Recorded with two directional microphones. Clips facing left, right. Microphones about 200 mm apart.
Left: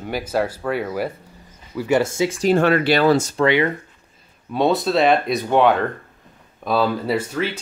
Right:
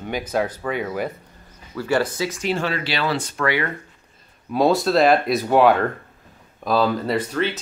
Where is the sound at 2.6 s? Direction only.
55° left (ahead or behind).